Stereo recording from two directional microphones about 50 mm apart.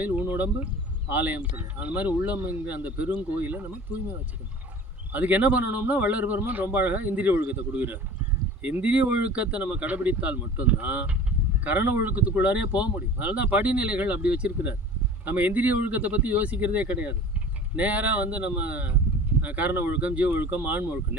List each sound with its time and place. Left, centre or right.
0.0 s a sound: right
1.1 s a man's voice: right
5.1 s a man's voice: right
12.1 s a man's voice: right